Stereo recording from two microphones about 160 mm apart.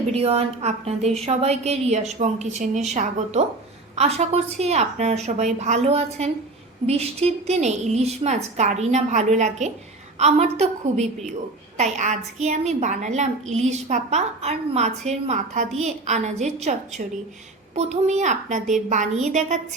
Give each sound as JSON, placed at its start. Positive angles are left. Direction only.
{"t": 0.2, "sound": "a woman's voice", "side_deg": -40}